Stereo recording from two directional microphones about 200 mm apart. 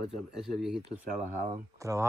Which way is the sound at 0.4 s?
Centre (ahead or behind).